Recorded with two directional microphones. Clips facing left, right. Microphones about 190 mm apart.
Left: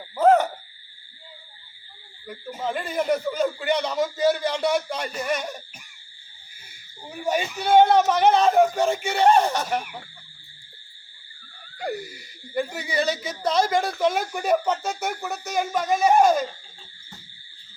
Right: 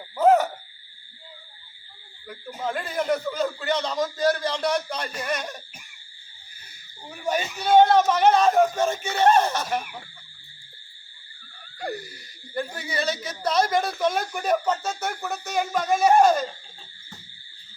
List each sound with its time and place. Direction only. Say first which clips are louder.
0.2 s owl: left 1 dB; centre (ahead or behind)
2.2 s a man's voice: left 1 dB; 10° left (ahead or behind)
7.0 s a man's voice: left 2 dB; 10° left (ahead or behind)
11.8 s speech: left 2 dB; 10° left (ahead or behind)
13.7 s speech: left 1 dB; 25° left (ahead or behind)
14.0 s speech: left 2 dB; 10° left (ahead or behind)